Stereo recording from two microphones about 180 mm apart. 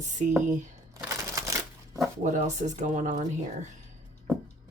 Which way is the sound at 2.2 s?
40° right (ahead or behind).